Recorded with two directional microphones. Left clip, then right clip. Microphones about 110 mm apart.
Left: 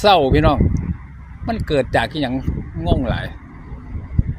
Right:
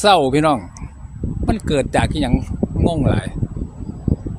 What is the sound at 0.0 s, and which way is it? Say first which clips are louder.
Speech: even; 30° right (ahead or behind).